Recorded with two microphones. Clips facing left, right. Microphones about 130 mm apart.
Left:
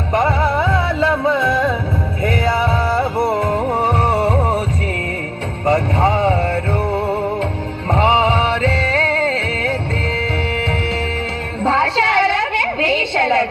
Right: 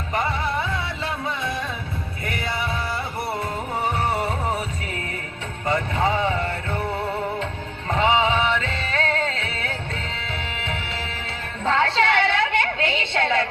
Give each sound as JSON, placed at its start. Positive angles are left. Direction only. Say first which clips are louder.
{"t": 0.1, "sound": "music", "louder": "left 8 dB", "side_deg": 45}
{"t": 2.6, "sound": "music", "louder": "left 10 dB", "side_deg": 50}
{"t": 5.6, "sound": "music", "louder": "left 7 dB", "side_deg": 40}
{"t": 11.6, "sound": "a sound", "louder": "left 4 dB", "side_deg": 35}